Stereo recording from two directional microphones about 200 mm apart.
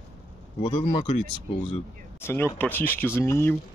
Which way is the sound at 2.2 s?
10° left (ahead or behind).